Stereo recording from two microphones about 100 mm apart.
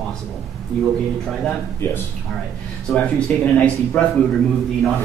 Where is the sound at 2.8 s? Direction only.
10° left (ahead or behind).